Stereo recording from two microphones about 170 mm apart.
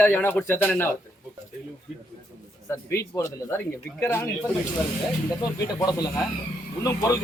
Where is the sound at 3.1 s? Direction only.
20° left (ahead or behind).